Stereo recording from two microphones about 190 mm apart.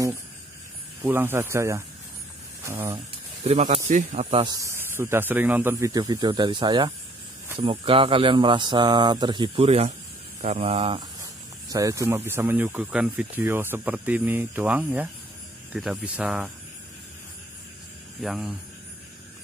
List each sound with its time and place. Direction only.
1.0 s speech: 10° right (ahead or behind)
3.4 s speech: 35° right (ahead or behind)
4.6 s speech: 15° right (ahead or behind); by 11.1 s 30° right (ahead or behind)
11.7 s speech: 15° right (ahead or behind)
18.2 s speech: centre (ahead or behind)